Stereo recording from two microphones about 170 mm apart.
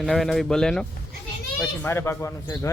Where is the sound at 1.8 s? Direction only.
15° left (ahead or behind).